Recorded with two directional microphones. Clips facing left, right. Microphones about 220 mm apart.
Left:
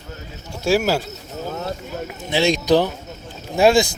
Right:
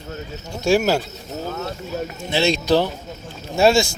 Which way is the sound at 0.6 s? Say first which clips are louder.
Right 1 dB; 5° left (ahead or behind).